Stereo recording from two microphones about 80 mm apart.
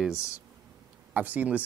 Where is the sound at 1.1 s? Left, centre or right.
Centre.